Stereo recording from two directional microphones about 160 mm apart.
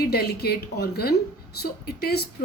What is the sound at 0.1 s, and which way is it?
A woman's voice, 80° left.